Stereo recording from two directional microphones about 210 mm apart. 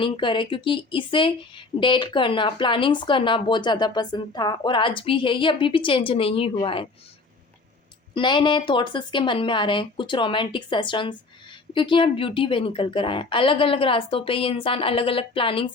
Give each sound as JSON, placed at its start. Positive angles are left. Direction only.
{"t": 0.0, "sound": "speech", "side_deg": 25}
{"t": 8.1, "sound": "speech", "side_deg": 20}